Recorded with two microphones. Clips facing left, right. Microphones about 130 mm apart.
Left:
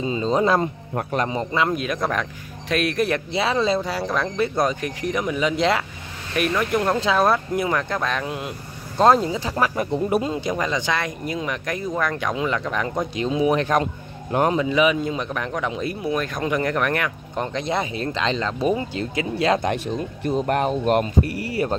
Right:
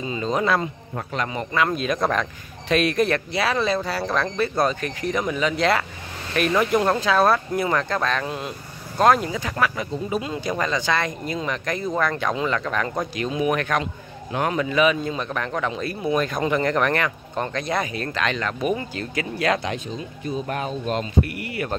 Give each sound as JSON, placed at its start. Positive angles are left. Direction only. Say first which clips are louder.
{"t": 0.0, "sound": "speech", "louder": "left 3 dB", "side_deg": 25}
{"t": 1.7, "sound": "speech", "louder": "right 1 dB", "side_deg": 5}
{"t": 3.3, "sound": "speech", "louder": "left 1 dB", "side_deg": 20}
{"t": 6.7, "sound": "speech", "louder": "right 1 dB", "side_deg": 0}
{"t": 7.0, "sound": "speech", "louder": "even", "side_deg": 20}
{"t": 8.9, "sound": "speech", "louder": "left 2 dB", "side_deg": 30}
{"t": 9.8, "sound": "speech", "louder": "left 5 dB", "side_deg": 65}
{"t": 10.5, "sound": "speech", "louder": "right 3 dB", "side_deg": 15}
{"t": 13.0, "sound": "speech", "louder": "left 6 dB", "side_deg": 25}
{"t": 14.5, "sound": "speech", "louder": "right 2 dB", "side_deg": 20}
{"t": 16.1, "sound": "speech", "louder": "right 3 dB", "side_deg": 0}
{"t": 19.6, "sound": "speech", "louder": "left 5 dB", "side_deg": 60}
{"t": 21.2, "sound": "speech", "louder": "left 2 dB", "side_deg": 35}